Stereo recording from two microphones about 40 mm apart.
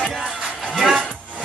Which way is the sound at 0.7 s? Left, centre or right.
Centre.